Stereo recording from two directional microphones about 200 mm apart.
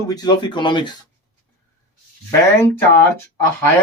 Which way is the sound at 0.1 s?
20° left (ahead or behind).